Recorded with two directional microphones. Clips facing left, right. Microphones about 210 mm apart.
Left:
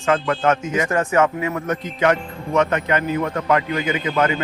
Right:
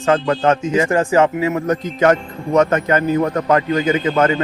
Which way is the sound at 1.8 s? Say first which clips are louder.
Right 3 dB; 45° right (ahead or behind).